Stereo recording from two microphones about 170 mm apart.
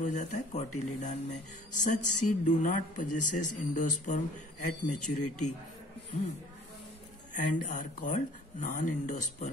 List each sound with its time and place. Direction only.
0.0 s speech: 45° left (ahead or behind)
7.3 s speech: 50° left (ahead or behind)